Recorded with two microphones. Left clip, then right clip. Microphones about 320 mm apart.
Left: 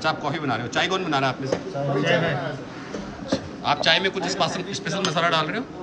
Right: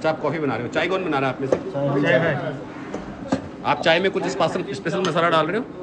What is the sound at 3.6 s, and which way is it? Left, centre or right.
A man's voice, centre.